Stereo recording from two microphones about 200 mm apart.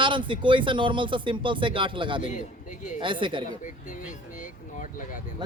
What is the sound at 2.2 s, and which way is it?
Speech, 40° left (ahead or behind).